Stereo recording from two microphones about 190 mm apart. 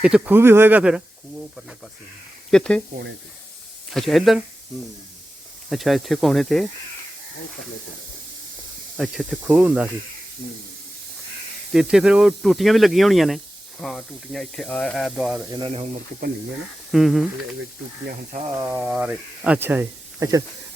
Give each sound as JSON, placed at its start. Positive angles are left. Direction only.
{"t": 0.0, "sound": "speech", "side_deg": -5}
{"t": 2.5, "sound": "speech", "side_deg": 5}
{"t": 3.9, "sound": "speech", "side_deg": 0}
{"t": 5.7, "sound": "speech", "side_deg": 0}
{"t": 9.0, "sound": "speech", "side_deg": 0}
{"t": 11.7, "sound": "speech", "side_deg": -5}
{"t": 15.5, "sound": "speech", "side_deg": -30}
{"t": 16.9, "sound": "speech", "side_deg": 0}
{"t": 18.5, "sound": "speech", "side_deg": -10}